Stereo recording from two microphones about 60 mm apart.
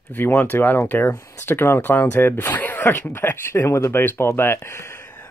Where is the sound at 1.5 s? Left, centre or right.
Left.